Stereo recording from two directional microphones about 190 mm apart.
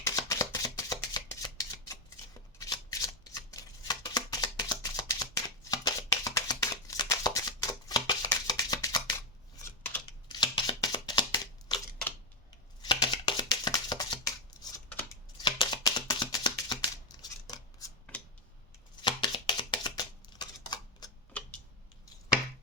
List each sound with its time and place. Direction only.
0.0 s shuffling cards: 15° left (ahead or behind)
2.6 s shuffling cards: 20° left (ahead or behind)
12.8 s a sound: 25° left (ahead or behind)
19.0 s chopping: 25° left (ahead or behind)
20.4 s typewriter: 20° left (ahead or behind)